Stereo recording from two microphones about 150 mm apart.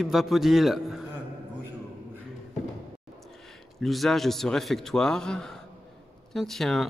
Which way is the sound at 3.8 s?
Centre (ahead or behind).